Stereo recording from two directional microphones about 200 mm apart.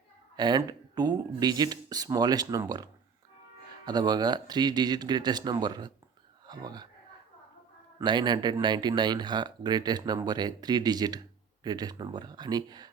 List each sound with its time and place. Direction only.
0.3 s speech: 20° right (ahead or behind)
7.9 s speech: 20° right (ahead or behind)